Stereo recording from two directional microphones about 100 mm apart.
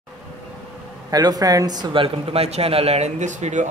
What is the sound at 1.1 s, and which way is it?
Speech, 40° right (ahead or behind).